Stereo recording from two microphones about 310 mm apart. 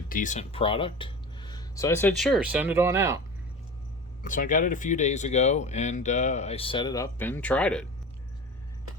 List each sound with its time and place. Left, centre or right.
0.1 s speech: left; by 3.2 s centre
4.2 s speech: left; by 7.9 s centre